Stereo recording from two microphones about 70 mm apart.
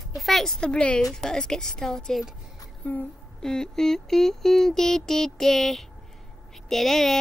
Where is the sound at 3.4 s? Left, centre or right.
Centre.